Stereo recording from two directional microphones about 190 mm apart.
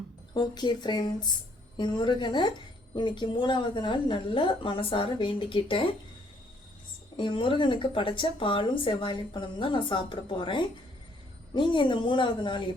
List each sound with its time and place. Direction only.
0.3 s speech: 20° left (ahead or behind)
7.2 s speech: 25° left (ahead or behind)